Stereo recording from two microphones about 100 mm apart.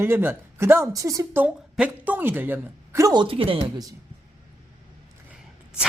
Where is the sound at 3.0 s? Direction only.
45° right (ahead or behind).